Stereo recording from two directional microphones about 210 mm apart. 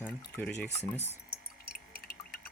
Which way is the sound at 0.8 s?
30° left (ahead or behind).